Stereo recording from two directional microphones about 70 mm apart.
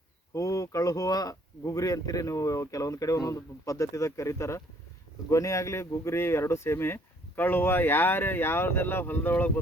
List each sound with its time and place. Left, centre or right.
0.3 s speech: left